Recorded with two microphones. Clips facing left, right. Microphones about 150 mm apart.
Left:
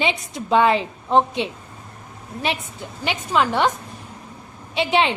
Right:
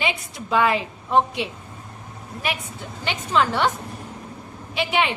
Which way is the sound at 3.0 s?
15° left (ahead or behind).